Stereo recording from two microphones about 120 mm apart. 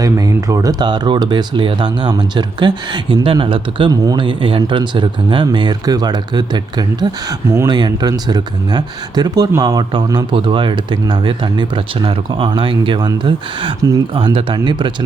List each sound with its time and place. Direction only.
0.0 s speech: 30° right (ahead or behind)